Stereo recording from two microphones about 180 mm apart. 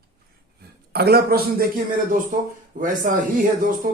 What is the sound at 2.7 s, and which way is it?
A man's voice, 45° right (ahead or behind).